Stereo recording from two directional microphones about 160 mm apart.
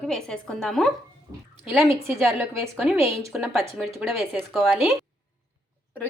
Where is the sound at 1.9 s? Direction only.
15° right (ahead or behind).